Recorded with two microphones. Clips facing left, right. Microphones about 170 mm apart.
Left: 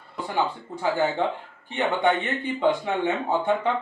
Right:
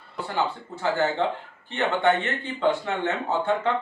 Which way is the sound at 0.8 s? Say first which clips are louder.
Even; 15° left (ahead or behind).